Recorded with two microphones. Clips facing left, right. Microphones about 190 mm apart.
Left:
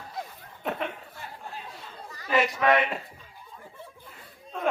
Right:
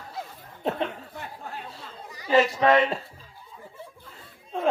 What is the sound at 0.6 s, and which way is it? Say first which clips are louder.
Speech: right 4 dB; 30° right (ahead or behind).